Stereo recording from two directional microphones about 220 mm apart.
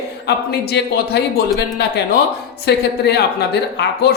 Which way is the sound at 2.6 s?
50° left (ahead or behind).